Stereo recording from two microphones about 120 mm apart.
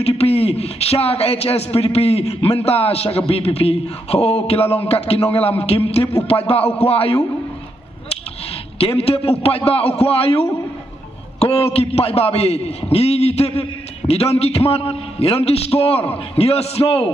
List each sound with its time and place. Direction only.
0.0 s a man's voice: 55° left (ahead or behind)
8.7 s speech: 55° left (ahead or behind)